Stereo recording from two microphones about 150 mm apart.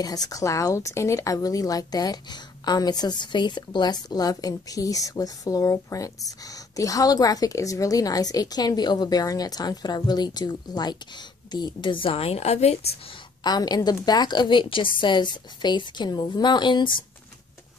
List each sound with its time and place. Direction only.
0.0 s a woman's voice: 25° left (ahead or behind); by 12.9 s 45° left (ahead or behind)
13.4 s speech: 25° left (ahead or behind)